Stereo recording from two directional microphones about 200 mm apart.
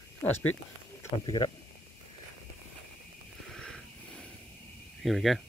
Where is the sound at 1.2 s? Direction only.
20° left (ahead or behind).